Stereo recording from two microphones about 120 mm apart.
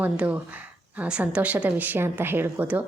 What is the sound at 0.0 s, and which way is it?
A woman's voice, 10° right (ahead or behind).